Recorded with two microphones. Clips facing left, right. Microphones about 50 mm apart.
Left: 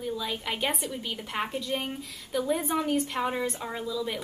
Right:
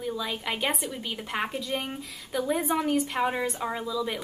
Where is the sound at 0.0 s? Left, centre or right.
Centre.